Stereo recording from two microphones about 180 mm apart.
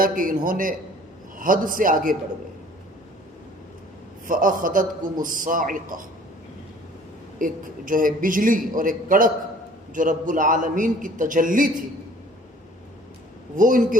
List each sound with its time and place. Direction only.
0.0 s a man's voice: 50° right (ahead or behind)
4.3 s a man's voice: 50° right (ahead or behind)
7.3 s a man's voice: 50° right (ahead or behind)
13.6 s a man's voice: 50° right (ahead or behind)